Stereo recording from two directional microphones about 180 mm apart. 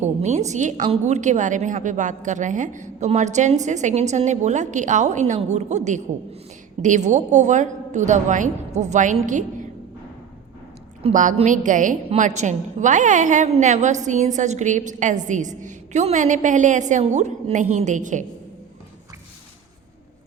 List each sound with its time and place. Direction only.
0.0 s a woman's voice: 40° right (ahead or behind)
11.1 s a woman's voice: 45° right (ahead or behind)